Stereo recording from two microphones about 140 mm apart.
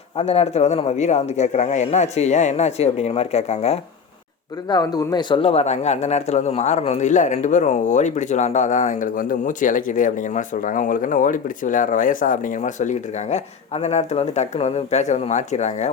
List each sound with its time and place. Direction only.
0.2 s a man's voice: 45° left (ahead or behind)
4.7 s speech: 30° left (ahead or behind); by 15.9 s 55° left (ahead or behind)